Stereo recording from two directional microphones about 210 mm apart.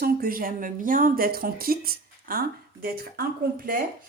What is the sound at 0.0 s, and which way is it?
Speech, 45° right (ahead or behind).